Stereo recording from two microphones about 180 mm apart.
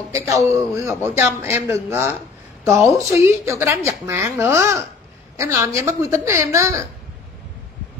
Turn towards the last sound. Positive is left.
turn(degrees=-15)  # may be behind; listen again after turning